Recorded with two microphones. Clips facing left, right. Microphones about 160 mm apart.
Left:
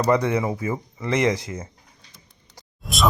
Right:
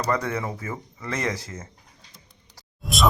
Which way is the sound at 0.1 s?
15° left (ahead or behind).